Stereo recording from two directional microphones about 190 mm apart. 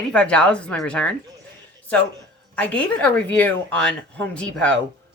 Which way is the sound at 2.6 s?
5° left (ahead or behind).